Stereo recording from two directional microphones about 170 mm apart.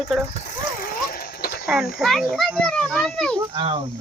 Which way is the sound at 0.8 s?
60° left (ahead or behind).